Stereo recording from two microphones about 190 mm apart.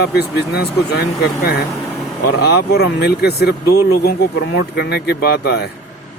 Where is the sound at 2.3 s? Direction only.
60° left (ahead or behind).